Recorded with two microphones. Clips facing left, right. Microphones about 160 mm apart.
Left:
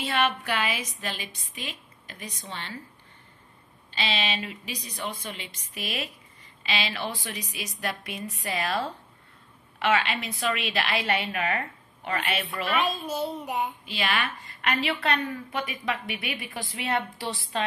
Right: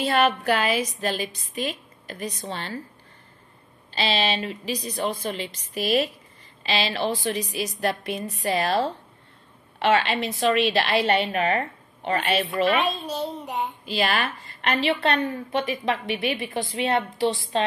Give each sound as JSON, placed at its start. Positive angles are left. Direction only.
{"t": 0.0, "sound": "a woman's voice", "side_deg": -40}
{"t": 3.9, "sound": "a woman's voice", "side_deg": -35}
{"t": 13.8, "sound": "a woman's voice", "side_deg": -40}